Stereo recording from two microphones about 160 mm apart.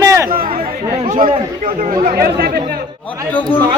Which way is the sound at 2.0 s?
70° right (ahead or behind).